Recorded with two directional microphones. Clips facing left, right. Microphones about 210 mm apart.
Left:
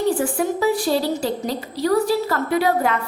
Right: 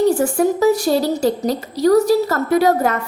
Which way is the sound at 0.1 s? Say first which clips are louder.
Right 5 dB; 45° right (ahead or behind).